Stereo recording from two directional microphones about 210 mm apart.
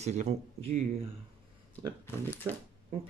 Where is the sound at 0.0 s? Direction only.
35° right (ahead or behind).